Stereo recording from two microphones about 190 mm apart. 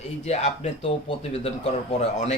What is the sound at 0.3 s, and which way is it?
Speech, 35° left (ahead or behind).